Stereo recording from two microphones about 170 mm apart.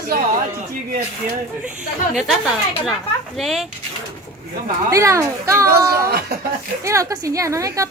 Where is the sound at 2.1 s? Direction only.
Centre (ahead or behind).